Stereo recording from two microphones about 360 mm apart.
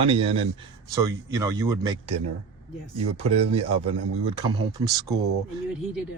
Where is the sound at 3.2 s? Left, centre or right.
Centre.